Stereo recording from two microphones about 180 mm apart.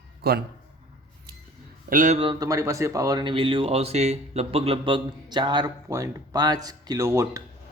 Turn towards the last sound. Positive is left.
turn(degrees=-15)  # may be behind; listen again after turning